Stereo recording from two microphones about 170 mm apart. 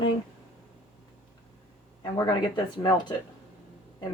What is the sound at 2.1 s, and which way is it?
Speech, 25° left (ahead or behind).